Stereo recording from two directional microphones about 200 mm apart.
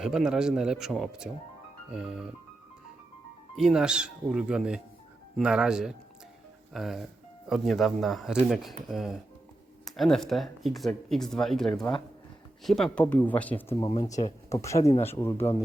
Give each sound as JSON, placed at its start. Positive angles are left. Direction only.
{"t": 0.0, "sound": "speech", "side_deg": -5}
{"t": 3.5, "sound": "speech", "side_deg": 0}